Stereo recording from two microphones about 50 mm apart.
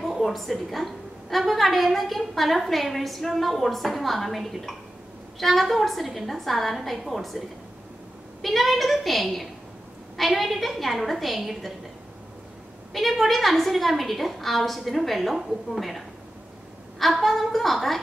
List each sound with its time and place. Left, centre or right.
0.0 s a woman's voice: centre
12.9 s a woman's voice: centre
17.0 s a woman's voice: centre